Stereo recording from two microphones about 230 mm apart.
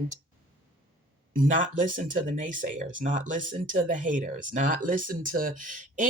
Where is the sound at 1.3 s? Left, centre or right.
Right.